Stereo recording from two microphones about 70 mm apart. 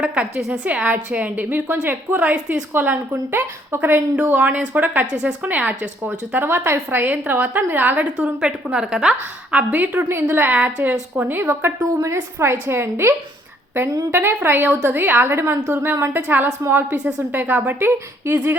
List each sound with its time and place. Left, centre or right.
0.0 s a woman's voice: centre
2.7 s a woman's voice: right
6.4 s a woman's voice: right
11.8 s a woman's voice: right
12.4 s a woman's voice: right